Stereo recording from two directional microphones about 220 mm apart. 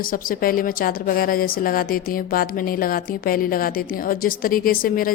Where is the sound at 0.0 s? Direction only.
40° left (ahead or behind).